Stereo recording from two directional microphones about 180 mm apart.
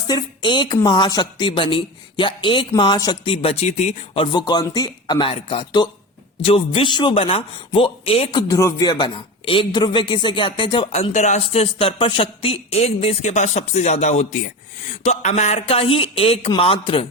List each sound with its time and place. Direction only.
0.1 s a man's voice: 25° left (ahead or behind)